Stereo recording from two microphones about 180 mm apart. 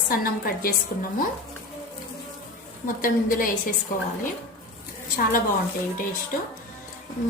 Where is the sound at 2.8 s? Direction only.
50° left (ahead or behind).